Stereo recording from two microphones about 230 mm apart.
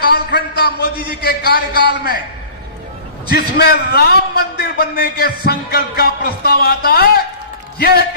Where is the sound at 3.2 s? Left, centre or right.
Left.